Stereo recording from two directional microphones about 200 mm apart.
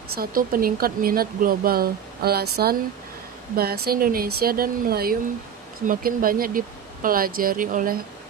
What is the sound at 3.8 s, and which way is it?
Speech, 45° right (ahead or behind).